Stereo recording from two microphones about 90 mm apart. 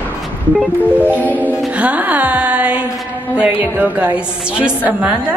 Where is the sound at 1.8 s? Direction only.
15° right (ahead or behind).